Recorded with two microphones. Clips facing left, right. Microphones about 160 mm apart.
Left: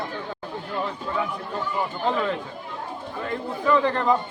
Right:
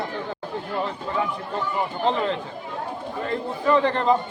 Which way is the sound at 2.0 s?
30° right (ahead or behind).